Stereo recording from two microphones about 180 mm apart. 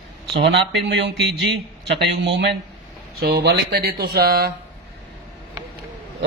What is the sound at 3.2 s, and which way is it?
Speech, 65° right (ahead or behind).